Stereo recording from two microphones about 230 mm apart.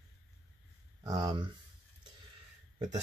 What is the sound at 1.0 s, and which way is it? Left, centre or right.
Speech, centre.